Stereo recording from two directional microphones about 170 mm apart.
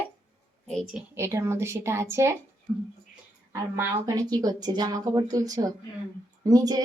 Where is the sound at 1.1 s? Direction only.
15° right (ahead or behind).